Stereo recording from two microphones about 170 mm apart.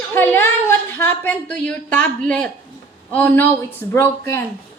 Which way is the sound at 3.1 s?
10° left (ahead or behind).